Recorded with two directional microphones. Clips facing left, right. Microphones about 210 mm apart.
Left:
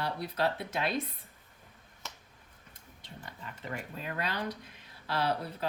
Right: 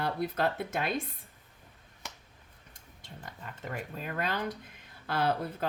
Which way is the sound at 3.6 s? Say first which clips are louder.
Right 1 dB; 45° right (ahead or behind).